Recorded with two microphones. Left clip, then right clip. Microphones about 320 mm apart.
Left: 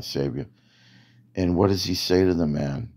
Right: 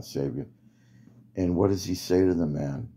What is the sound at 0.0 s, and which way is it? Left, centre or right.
Speech, left.